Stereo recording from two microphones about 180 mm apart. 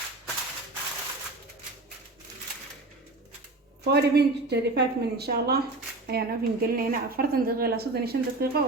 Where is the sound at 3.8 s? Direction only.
65° right (ahead or behind).